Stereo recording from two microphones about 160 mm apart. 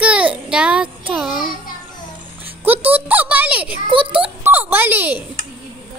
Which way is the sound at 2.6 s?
10° right (ahead or behind).